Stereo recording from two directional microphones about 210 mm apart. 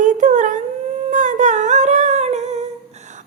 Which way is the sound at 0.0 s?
35° right (ahead or behind).